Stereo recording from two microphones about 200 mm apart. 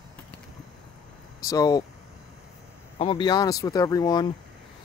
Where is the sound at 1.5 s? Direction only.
20° left (ahead or behind).